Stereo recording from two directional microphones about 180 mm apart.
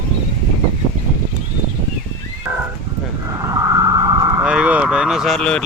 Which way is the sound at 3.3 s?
20° right (ahead or behind).